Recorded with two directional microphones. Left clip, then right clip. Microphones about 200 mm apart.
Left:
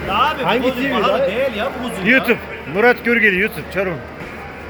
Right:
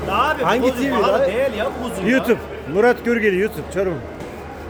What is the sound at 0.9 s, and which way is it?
A man's voice, 25° right (ahead or behind).